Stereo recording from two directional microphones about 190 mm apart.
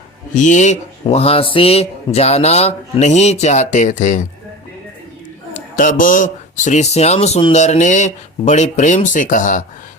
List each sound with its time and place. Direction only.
0.3 s speech: 40° left (ahead or behind)
5.7 s speech: 45° left (ahead or behind)